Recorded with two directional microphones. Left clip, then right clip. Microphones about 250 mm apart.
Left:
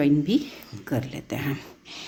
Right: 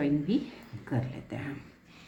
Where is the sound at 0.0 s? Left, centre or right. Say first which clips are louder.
Left 7 dB; left.